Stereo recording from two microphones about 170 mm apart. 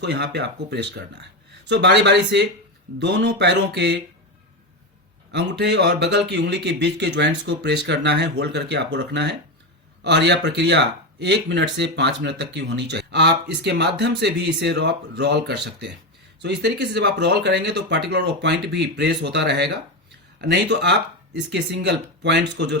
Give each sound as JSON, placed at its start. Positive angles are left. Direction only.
{"t": 0.0, "sound": "speech", "side_deg": -85}
{"t": 1.6, "sound": "speech", "side_deg": -90}
{"t": 5.3, "sound": "speech", "side_deg": -80}
{"t": 22.2, "sound": "speech", "side_deg": -90}